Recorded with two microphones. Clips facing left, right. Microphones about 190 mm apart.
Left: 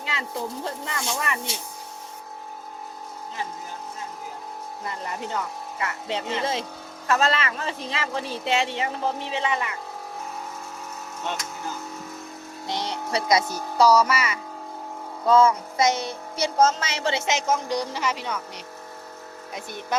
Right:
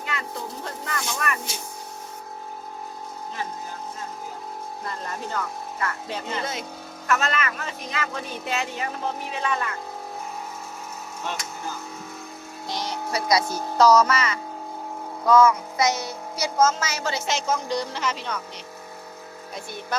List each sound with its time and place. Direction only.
0.2 s speech: 25° left (ahead or behind)
4.9 s speech: 15° left (ahead or behind)
12.7 s speech: 65° left (ahead or behind)
13.1 s speech: 25° left (ahead or behind)
13.5 s speech: 10° left (ahead or behind)
15.3 s speech: 30° left (ahead or behind)